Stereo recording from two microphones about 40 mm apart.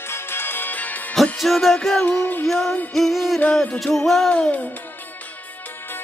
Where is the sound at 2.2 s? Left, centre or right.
Left.